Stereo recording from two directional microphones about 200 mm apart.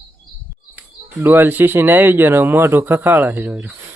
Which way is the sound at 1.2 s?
10° right (ahead or behind).